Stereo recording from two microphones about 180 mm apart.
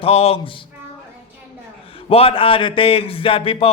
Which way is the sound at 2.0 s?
30° left (ahead or behind).